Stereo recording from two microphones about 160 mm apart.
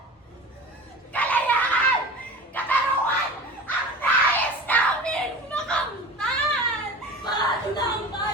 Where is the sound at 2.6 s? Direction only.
10° left (ahead or behind).